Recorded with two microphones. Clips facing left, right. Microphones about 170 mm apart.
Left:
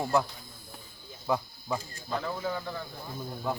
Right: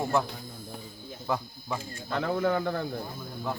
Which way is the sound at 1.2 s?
5° left (ahead or behind).